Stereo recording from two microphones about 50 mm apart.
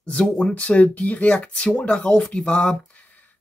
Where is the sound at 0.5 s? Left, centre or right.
Left.